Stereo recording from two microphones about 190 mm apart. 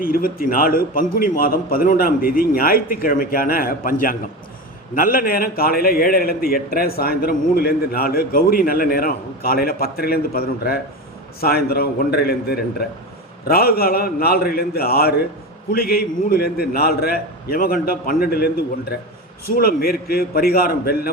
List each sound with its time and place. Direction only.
0.0 s a man's voice: 50° left (ahead or behind)